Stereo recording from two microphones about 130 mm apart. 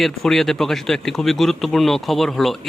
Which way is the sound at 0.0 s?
Centre (ahead or behind).